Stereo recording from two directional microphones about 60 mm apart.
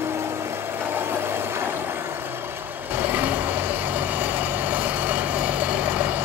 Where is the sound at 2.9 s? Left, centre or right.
Right.